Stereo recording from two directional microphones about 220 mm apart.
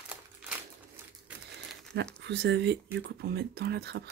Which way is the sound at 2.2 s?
50° right (ahead or behind).